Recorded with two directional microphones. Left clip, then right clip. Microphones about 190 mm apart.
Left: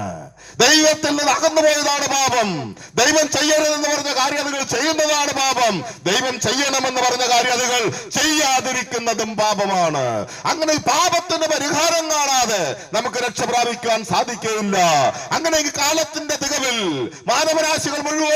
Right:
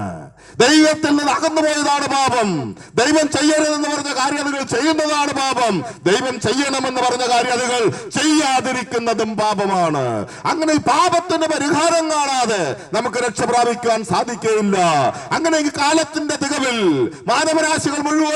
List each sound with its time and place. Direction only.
0.6 s a man's voice: 10° left (ahead or behind)
17.9 s a man's voice: 25° left (ahead or behind)